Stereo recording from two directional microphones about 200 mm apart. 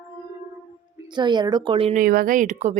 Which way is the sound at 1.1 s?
20° right (ahead or behind).